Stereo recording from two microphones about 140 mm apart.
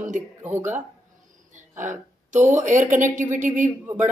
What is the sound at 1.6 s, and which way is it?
Speech, 65° right (ahead or behind).